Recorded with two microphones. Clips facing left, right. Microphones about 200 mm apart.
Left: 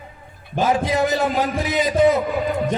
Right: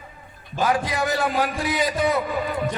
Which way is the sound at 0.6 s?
20° left (ahead or behind).